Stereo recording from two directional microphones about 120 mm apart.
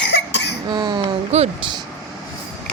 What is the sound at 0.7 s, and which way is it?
Speech, 35° right (ahead or behind).